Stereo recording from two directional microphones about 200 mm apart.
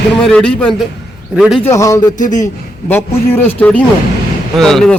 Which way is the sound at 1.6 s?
15° left (ahead or behind).